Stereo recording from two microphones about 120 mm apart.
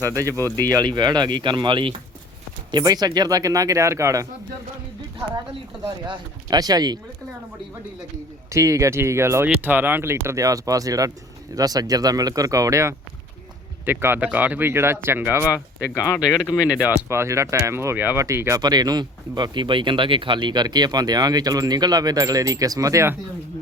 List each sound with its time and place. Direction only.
0.1 s speech: 25° right (ahead or behind)
0.3 s speech: 20° left (ahead or behind)
0.7 s speech: 35° right (ahead or behind)
5.8 s speech: 40° right (ahead or behind)
8.4 s speech: 25° right (ahead or behind)
15.4 s speech: 20° left (ahead or behind)
16.2 s speech: centre (ahead or behind)
17.1 s speech: 25° right (ahead or behind)
18.6 s speech: 35° right (ahead or behind)